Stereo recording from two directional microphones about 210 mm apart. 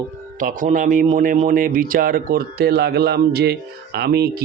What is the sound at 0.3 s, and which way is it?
Speech, 40° right (ahead or behind).